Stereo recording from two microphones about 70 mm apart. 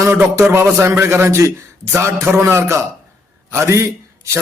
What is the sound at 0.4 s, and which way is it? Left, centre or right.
A man's voice, right.